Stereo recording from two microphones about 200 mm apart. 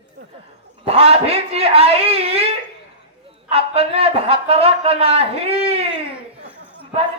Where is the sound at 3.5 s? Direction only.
30° right (ahead or behind).